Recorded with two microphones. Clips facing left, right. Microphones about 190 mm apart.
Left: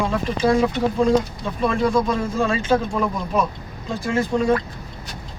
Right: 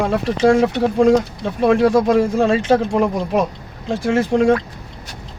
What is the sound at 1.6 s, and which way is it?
Speech, 70° right (ahead or behind).